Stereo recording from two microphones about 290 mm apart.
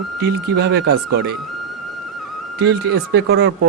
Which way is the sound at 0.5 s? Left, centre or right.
Right.